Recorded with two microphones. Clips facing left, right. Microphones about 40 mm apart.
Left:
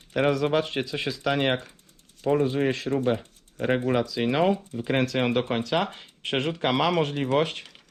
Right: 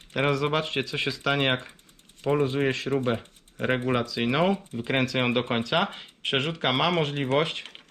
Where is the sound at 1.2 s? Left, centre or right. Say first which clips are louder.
Left 1 dB; right.